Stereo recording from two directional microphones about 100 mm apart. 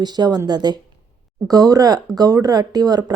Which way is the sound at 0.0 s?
45° right (ahead or behind).